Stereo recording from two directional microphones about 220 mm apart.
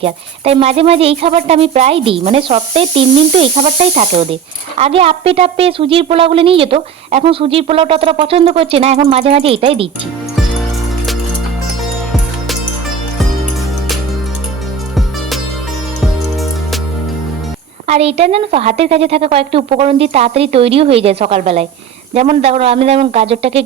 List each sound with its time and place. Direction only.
0.0 s a woman's voice: 25° right (ahead or behind)
17.8 s a woman's voice: 30° right (ahead or behind)